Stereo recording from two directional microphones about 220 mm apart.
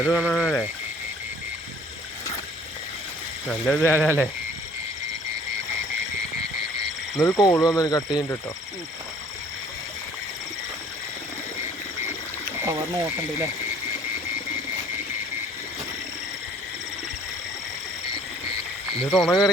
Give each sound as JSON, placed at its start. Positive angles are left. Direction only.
{"t": 0.0, "sound": "speech", "side_deg": -5}
{"t": 3.5, "sound": "speech", "side_deg": 5}
{"t": 3.9, "sound": "speech", "side_deg": -10}
{"t": 7.2, "sound": "speech", "side_deg": 15}
{"t": 19.1, "sound": "speech", "side_deg": 0}